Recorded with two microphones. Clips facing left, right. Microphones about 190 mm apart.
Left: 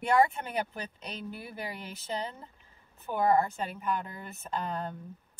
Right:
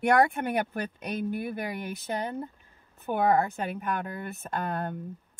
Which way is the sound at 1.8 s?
55° right (ahead or behind).